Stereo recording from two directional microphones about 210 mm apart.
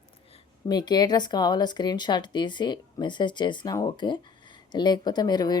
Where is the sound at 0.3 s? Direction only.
25° left (ahead or behind).